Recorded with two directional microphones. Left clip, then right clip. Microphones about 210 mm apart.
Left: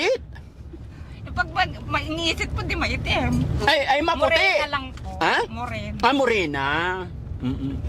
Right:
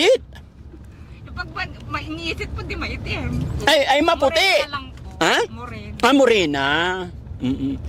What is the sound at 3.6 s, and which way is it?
Speech, 35° right (ahead or behind).